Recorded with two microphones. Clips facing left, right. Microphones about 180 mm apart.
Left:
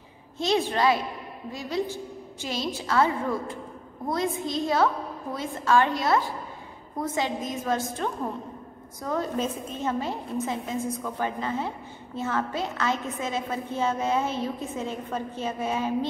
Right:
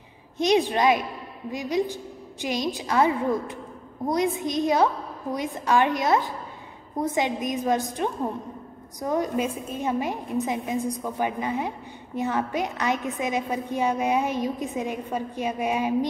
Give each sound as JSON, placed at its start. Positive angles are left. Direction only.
{"t": 0.4, "sound": "a woman's voice", "side_deg": -15}